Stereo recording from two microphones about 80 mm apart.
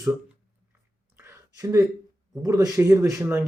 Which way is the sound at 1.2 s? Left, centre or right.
Right.